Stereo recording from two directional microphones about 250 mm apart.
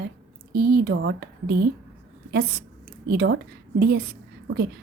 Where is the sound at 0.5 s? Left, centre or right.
Right.